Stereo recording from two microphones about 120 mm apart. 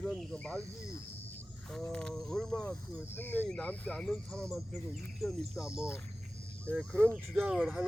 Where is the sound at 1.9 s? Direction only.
5° left (ahead or behind).